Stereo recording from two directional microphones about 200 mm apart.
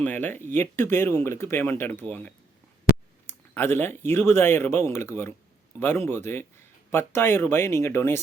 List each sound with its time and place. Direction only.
0.0 s speech: 10° left (ahead or behind)
2.9 s a sound: 50° left (ahead or behind)
3.2 s speech: 10° left (ahead or behind)